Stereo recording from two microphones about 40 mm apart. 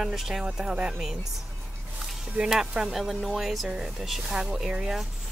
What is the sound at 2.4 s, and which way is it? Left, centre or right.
Speech, centre.